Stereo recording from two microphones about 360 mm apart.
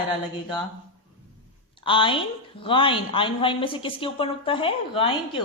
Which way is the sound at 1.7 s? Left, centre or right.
Centre.